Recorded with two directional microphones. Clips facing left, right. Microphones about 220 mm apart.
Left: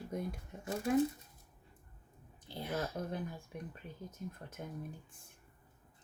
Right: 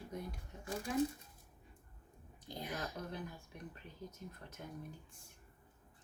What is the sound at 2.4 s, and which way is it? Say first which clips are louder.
Speech: left 4 dB; 15° right (ahead or behind).